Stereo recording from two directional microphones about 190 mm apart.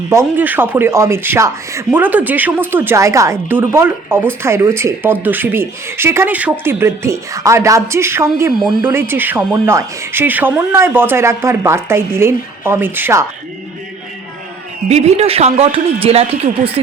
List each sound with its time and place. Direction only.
0.1 s speech: 10° right (ahead or behind)
8.5 s speech: centre (ahead or behind)
8.9 s speech: 10° right (ahead or behind)
14.8 s a man's voice: 35° right (ahead or behind)